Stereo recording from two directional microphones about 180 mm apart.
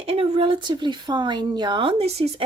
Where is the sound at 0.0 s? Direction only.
30° right (ahead or behind).